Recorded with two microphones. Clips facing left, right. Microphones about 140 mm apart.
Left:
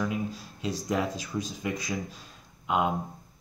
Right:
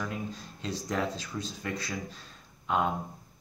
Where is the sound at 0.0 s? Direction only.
5° left (ahead or behind).